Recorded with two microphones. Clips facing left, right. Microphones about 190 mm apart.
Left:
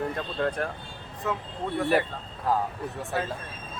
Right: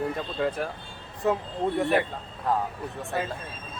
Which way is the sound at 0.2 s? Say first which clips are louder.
Even; 5° right (ahead or behind).